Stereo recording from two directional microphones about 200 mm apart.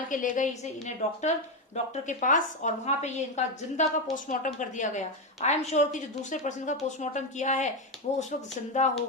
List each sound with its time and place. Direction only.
0.1 s a woman's voice: 40° left (ahead or behind)